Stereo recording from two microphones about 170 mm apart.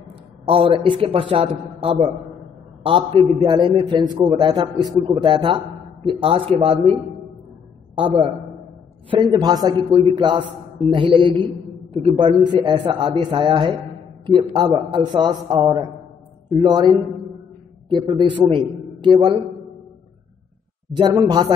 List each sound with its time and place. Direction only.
0.5 s a man's voice: 30° right (ahead or behind)
9.1 s a man's voice: 25° right (ahead or behind)
18.0 s a man's voice: 25° right (ahead or behind)
20.9 s a man's voice: 25° right (ahead or behind)